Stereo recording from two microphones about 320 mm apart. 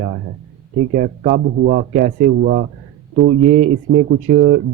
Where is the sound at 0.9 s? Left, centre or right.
Right.